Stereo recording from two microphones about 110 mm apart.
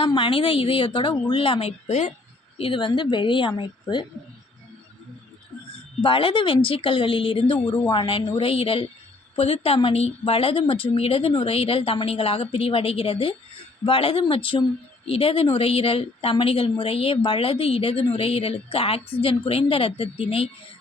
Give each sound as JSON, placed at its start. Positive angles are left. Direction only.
{"t": 0.0, "sound": "a woman's voice", "side_deg": 50}
{"t": 2.6, "sound": "a woman's voice", "side_deg": 50}
{"t": 6.0, "sound": "a woman's voice", "side_deg": 50}